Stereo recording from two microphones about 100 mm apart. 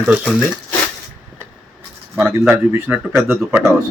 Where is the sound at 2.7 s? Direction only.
20° right (ahead or behind).